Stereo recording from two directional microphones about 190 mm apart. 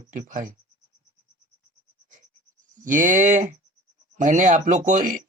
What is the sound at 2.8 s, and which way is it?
Speech, 45° right (ahead or behind).